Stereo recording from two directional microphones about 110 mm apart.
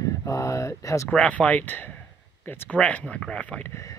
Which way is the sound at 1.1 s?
10° left (ahead or behind).